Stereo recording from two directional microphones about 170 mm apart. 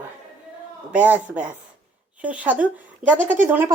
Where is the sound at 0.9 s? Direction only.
10° right (ahead or behind).